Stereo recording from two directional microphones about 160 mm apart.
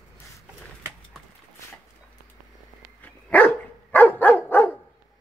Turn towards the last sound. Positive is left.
turn(degrees=10)  # may be behind; listen again after turning